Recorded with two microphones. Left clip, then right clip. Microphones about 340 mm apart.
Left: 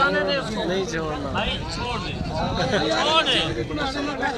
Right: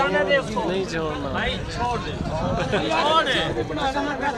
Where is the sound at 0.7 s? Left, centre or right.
Centre.